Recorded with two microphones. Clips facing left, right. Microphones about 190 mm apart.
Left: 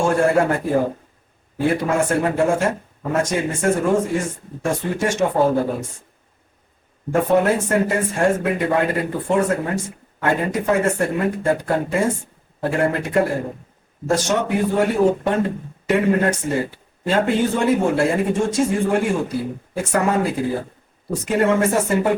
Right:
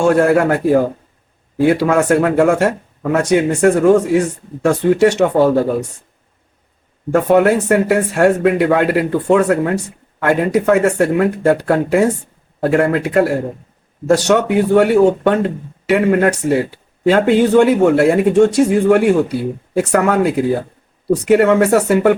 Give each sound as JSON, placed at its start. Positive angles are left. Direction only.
{"t": 0.0, "sound": "speech", "side_deg": -75}
{"t": 7.1, "sound": "speech", "side_deg": -80}